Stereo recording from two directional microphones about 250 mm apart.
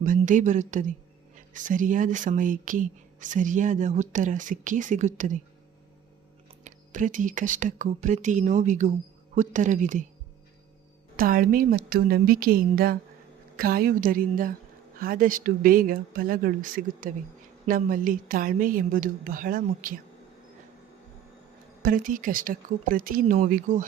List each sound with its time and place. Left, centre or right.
0.0 s speech: right
6.7 s speech: right
11.2 s speech: right
21.8 s speech: right